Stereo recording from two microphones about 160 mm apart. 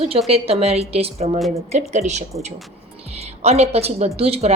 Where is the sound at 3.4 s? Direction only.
40° right (ahead or behind).